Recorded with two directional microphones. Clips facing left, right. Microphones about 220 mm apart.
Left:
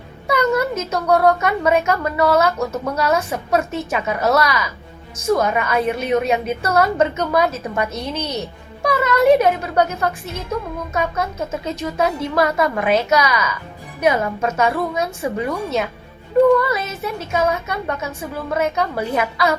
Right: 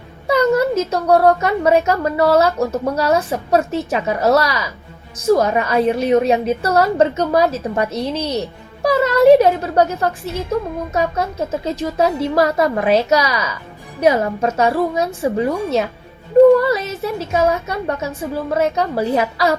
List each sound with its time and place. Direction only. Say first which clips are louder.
0.3 s speech: right 4 dB; 35° right (ahead or behind)